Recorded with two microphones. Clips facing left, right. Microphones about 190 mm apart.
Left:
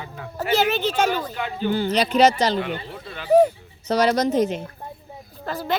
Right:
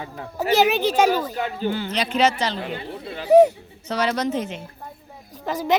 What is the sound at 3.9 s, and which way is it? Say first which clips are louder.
Speech: left 4 dB; 40° left (ahead or behind).